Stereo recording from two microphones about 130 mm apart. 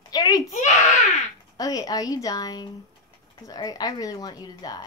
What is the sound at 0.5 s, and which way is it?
Speech, 65° left (ahead or behind).